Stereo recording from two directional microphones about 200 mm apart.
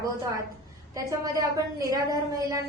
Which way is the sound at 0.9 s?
15° right (ahead or behind).